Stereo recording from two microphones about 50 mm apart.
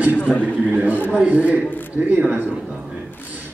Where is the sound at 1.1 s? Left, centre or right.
Right.